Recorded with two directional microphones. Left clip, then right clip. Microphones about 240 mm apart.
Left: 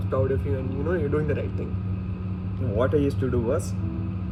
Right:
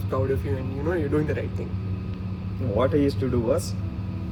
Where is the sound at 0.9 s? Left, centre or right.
Right.